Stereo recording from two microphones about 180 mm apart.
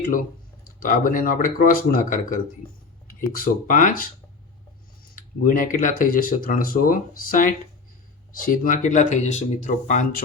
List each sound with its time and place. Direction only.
0.8 s speech: 50° left (ahead or behind)
5.1 s speech: 50° left (ahead or behind)